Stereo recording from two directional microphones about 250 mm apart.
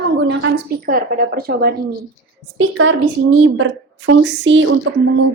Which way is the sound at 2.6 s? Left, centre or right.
Right.